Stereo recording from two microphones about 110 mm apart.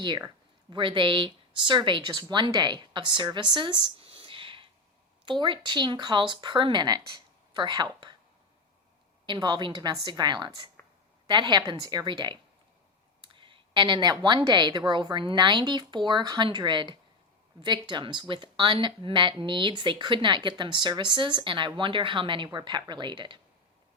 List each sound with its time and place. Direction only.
0.7 s speech: 45° right (ahead or behind)
3.3 s a sound: 45° right (ahead or behind)
5.2 s speech: 45° right (ahead or behind)
9.2 s speech: 45° right (ahead or behind)